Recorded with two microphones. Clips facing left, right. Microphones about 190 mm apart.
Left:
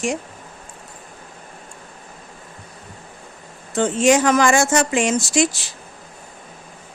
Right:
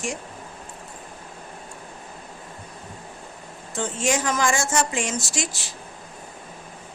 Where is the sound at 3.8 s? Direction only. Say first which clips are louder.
Left 9 dB; 90° left.